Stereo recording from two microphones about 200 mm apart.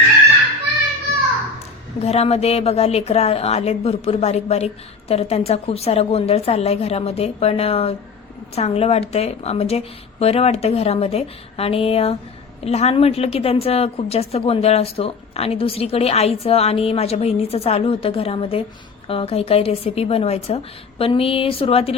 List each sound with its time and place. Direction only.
2.0 s a woman's voice: 30° left (ahead or behind)